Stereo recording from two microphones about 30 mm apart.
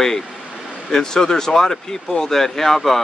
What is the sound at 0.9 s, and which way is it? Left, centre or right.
Speech, centre.